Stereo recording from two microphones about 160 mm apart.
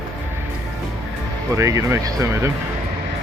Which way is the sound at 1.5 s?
20° right (ahead or behind).